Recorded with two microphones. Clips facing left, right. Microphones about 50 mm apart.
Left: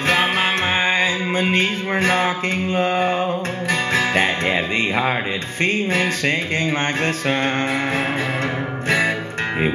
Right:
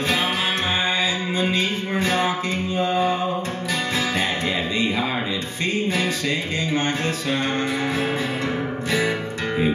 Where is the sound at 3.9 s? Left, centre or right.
Left.